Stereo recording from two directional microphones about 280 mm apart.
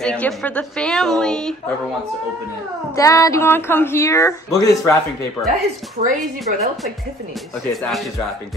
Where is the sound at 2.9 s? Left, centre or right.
Centre.